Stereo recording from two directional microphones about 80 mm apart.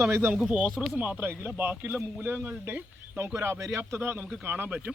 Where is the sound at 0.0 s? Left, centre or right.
Right.